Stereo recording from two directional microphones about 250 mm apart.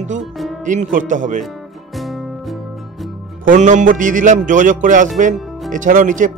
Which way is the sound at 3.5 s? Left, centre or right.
Right.